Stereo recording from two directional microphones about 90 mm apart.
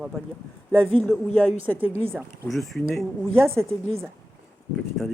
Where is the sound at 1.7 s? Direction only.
20° right (ahead or behind).